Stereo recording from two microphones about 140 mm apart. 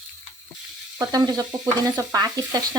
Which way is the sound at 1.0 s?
25° right (ahead or behind).